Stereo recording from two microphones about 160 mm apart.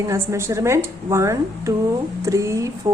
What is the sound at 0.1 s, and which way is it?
A woman's voice, 15° right (ahead or behind).